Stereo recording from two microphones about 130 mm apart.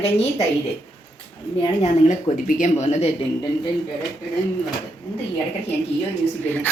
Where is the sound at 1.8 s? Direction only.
65° left (ahead or behind).